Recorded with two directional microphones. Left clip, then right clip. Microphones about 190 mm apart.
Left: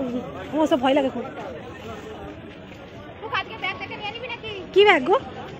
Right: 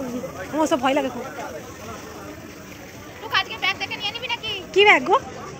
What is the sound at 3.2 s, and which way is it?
Children playing, 35° left (ahead or behind).